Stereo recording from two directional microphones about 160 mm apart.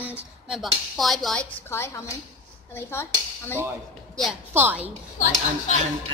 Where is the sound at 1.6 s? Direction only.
15° left (ahead or behind).